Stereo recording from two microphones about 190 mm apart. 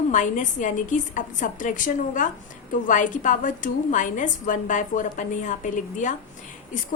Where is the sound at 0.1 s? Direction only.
40° left (ahead or behind).